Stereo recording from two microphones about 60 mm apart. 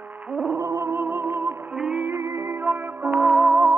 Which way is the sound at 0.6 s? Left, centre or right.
Right.